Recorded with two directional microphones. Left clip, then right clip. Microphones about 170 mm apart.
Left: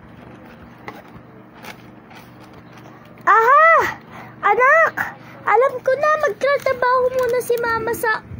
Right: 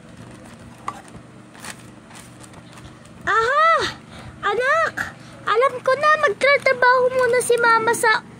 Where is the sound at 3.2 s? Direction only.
20° right (ahead or behind).